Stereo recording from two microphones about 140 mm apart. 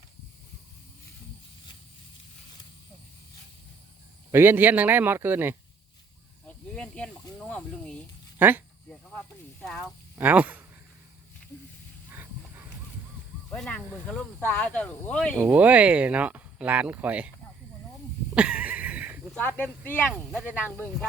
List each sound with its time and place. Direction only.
4.3 s speech: 15° right (ahead or behind)
6.7 s speech: 10° left (ahead or behind)
8.4 s speech: 15° right (ahead or behind)
8.9 s speech: 5° left (ahead or behind)
9.8 s speech: 10° right (ahead or behind)
12.1 s a sound: 15° right (ahead or behind)
13.5 s speech: 10° left (ahead or behind)
15.4 s speech: 15° right (ahead or behind)
18.3 s a sound: 10° right (ahead or behind)
19.3 s speech: 10° left (ahead or behind)